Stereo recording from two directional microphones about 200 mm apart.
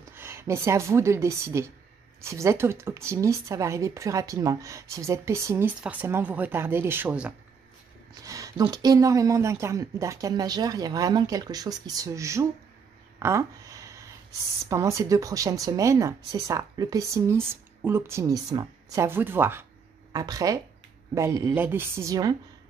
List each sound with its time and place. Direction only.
0.1 s a woman's voice: 10° right (ahead or behind)
8.1 s speech: 15° right (ahead or behind)
13.2 s a sound: 15° right (ahead or behind)
14.7 s speech: 15° right (ahead or behind)